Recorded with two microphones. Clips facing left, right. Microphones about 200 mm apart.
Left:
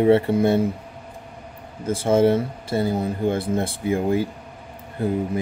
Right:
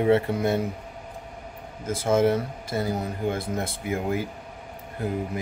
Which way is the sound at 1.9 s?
30° left (ahead or behind).